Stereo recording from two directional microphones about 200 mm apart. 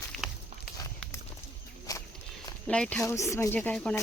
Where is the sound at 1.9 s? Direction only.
15° left (ahead or behind).